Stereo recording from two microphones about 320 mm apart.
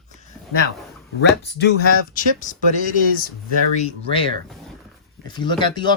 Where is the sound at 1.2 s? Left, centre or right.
Left.